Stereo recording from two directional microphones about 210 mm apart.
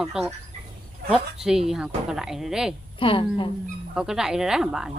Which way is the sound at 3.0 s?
25° left (ahead or behind).